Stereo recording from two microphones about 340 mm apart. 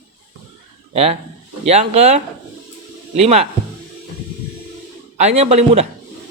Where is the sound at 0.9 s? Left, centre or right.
Centre.